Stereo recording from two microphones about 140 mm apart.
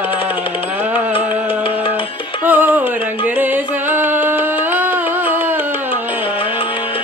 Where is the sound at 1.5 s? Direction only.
40° left (ahead or behind).